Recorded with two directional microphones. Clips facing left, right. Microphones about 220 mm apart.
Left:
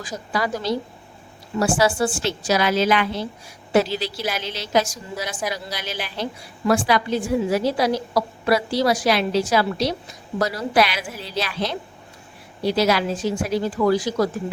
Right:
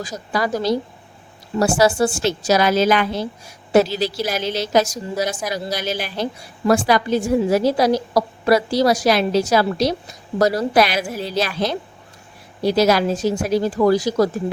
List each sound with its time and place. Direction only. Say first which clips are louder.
0.0 s a woman's voice: right 3 dB; 40° right (ahead or behind)